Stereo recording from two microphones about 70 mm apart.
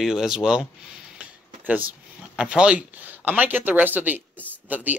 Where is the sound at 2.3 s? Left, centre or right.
Centre.